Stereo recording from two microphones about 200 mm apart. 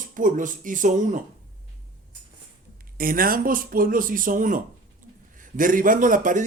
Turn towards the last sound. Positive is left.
turn(degrees=-40)  # may be behind; listen again after turning